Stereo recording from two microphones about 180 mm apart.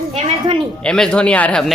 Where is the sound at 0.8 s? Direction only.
5° left (ahead or behind).